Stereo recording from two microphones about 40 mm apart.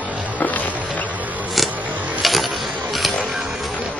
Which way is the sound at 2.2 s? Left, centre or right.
Centre.